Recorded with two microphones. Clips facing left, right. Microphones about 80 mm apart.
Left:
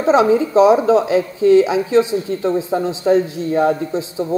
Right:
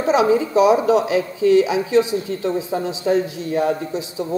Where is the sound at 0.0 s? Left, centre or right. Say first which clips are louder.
Left 3 dB; left.